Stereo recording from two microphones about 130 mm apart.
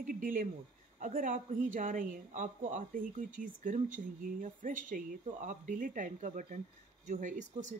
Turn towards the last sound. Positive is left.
turn(degrees=-75)  # may be behind; listen again after turning